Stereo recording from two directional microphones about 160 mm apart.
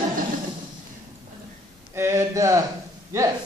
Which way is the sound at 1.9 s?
15° right (ahead or behind).